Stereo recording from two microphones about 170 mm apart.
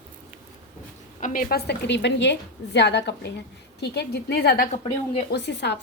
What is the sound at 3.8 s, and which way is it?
Speech, 80° left.